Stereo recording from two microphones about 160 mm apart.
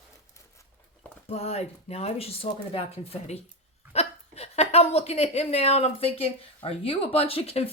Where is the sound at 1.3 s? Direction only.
40° left (ahead or behind).